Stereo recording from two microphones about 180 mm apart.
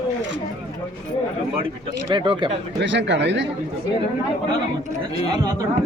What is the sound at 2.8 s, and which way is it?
Speech, 75° right (ahead or behind).